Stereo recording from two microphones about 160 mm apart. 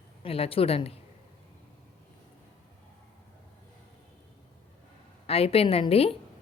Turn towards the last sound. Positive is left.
turn(degrees=35)  # may be behind; listen again after turning